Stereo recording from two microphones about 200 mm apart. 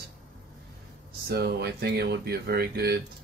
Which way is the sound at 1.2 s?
55° right (ahead or behind).